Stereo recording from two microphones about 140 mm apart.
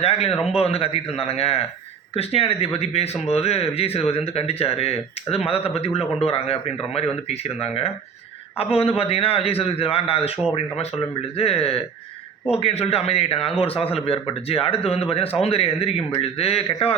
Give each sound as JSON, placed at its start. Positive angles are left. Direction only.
{"t": 0.0, "sound": "speech", "side_deg": 45}
{"t": 0.3, "sound": "speech", "side_deg": 0}
{"t": 0.6, "sound": "speech", "side_deg": 45}